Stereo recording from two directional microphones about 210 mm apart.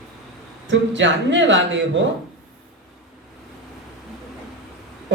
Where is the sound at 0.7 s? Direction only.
60° right (ahead or behind).